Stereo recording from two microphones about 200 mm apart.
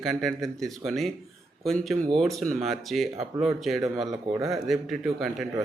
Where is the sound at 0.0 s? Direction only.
Centre (ahead or behind).